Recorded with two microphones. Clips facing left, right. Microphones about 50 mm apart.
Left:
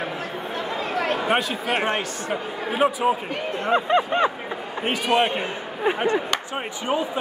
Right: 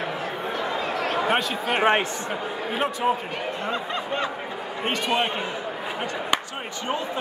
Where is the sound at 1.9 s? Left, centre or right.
Right.